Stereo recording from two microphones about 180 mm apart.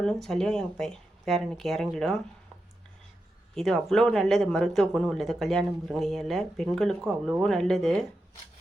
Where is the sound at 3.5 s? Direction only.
Centre (ahead or behind).